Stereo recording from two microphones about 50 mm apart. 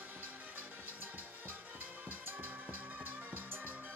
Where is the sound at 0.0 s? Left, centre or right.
Right.